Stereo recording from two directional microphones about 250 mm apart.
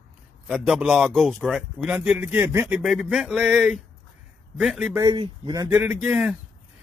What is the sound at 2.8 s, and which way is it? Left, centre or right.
Speech, centre.